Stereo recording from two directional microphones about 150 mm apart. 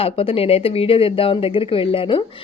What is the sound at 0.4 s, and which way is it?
Speech, 40° left (ahead or behind).